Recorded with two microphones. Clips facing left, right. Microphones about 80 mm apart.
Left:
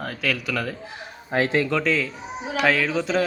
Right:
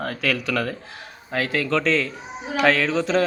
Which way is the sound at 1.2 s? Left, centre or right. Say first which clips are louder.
Left 3 dB; left.